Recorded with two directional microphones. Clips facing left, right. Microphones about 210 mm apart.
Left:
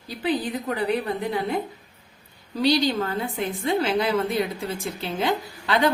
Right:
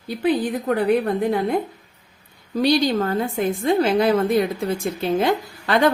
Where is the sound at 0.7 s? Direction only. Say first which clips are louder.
Right 6 dB; 50° right (ahead or behind).